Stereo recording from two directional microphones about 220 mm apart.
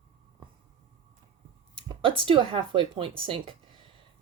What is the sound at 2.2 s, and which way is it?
Speech, 25° right (ahead or behind).